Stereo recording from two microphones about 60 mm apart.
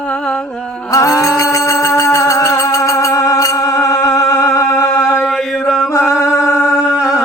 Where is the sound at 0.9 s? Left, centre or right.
Left.